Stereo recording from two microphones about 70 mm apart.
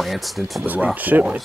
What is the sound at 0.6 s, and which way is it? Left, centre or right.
Speech, right.